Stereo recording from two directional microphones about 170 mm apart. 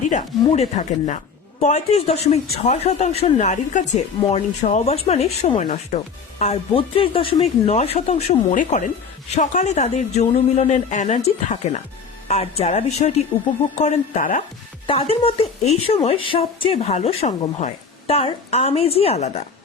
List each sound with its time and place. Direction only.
0.1 s a woman's voice: 40° left (ahead or behind)
14.8 s a woman's voice: 35° left (ahead or behind)